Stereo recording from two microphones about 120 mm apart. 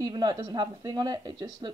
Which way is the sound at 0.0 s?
35° right (ahead or behind).